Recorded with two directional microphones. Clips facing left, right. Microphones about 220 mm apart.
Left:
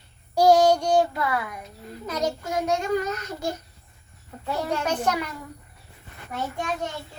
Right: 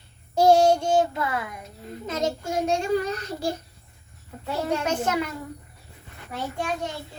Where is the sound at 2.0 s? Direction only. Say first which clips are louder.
Even; 25° right (ahead or behind).